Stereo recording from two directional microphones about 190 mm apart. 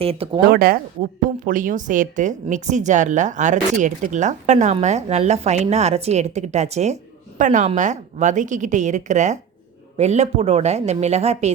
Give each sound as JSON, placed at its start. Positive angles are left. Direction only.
{"t": 0.0, "sound": "speech", "side_deg": -30}
{"t": 0.5, "sound": "speech", "side_deg": -50}